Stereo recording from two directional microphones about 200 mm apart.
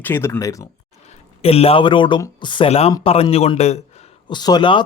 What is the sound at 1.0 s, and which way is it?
A man's voice, 30° left (ahead or behind).